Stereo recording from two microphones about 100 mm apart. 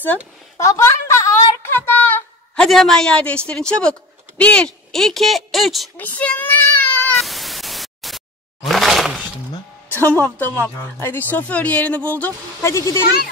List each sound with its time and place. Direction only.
0.6 s a sound: 30° left (ahead or behind)
2.6 s speech: 5° left (ahead or behind)
5.9 s child singing: 15° left (ahead or behind)
7.2 s static: centre (ahead or behind)
8.6 s breaking: centre (ahead or behind)
9.8 s speech: 20° left (ahead or behind)
12.6 s speech: 30° left (ahead or behind)